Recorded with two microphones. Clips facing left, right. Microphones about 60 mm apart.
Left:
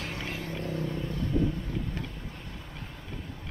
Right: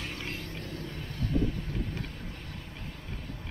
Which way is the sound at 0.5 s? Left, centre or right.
Left.